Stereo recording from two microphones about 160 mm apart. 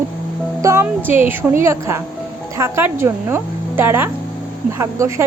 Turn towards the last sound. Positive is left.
turn(degrees=-20)  # may be behind; listen again after turning